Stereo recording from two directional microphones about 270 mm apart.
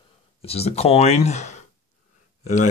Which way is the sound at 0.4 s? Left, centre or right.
Left.